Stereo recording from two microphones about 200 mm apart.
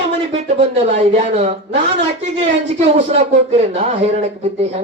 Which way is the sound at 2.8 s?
30° right (ahead or behind).